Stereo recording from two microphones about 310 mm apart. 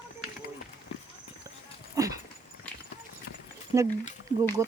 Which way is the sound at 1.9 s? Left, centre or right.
Centre.